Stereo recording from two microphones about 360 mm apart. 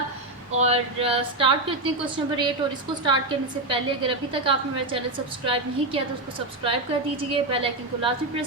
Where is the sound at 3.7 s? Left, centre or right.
Centre.